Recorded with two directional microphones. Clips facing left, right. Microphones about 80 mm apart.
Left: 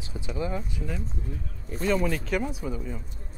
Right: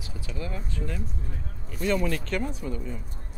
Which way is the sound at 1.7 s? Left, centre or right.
Left.